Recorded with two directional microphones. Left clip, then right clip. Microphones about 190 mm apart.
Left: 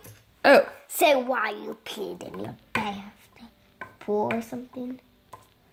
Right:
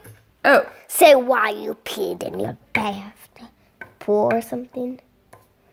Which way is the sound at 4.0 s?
50° right (ahead or behind).